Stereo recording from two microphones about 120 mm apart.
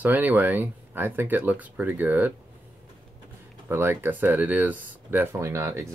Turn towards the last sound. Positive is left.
turn(degrees=-20)  # may be behind; listen again after turning